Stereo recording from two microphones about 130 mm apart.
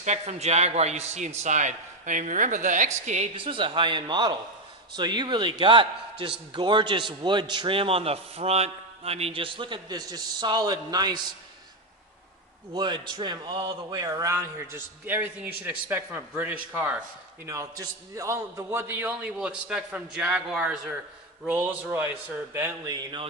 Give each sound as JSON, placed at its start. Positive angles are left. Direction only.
{"t": 0.0, "sound": "a man's voice", "side_deg": -60}
{"t": 3.3, "sound": "a man's voice", "side_deg": -40}
{"t": 12.7, "sound": "a man's voice", "side_deg": -35}